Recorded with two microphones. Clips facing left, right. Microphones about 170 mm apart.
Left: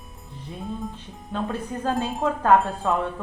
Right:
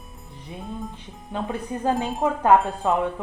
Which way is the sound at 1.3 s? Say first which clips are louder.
Even; 15° right (ahead or behind).